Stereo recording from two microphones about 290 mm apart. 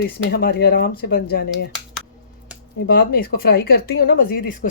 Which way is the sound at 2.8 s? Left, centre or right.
Left.